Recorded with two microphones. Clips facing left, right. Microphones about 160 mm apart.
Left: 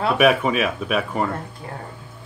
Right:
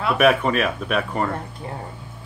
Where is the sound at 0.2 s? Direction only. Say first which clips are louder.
Right 1 dB; 5° left (ahead or behind).